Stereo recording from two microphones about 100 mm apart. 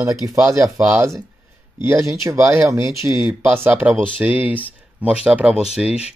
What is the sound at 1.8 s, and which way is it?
Speech, 25° right (ahead or behind).